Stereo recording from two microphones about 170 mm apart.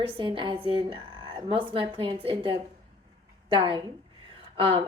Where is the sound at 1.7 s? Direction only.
30° right (ahead or behind).